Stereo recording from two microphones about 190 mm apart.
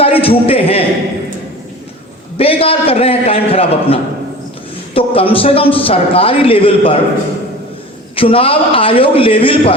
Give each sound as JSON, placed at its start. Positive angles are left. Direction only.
{"t": 0.0, "sound": "a man's voice", "side_deg": 30}
{"t": 2.4, "sound": "a man's voice", "side_deg": 30}
{"t": 8.1, "sound": "a man's voice", "side_deg": 30}